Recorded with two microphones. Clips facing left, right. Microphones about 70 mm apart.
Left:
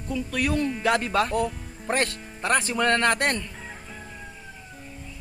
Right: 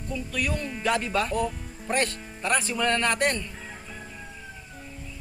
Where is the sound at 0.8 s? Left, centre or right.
Left.